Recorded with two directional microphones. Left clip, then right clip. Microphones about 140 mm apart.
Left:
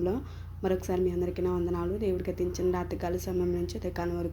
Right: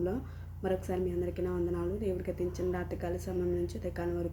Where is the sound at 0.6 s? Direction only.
20° left (ahead or behind).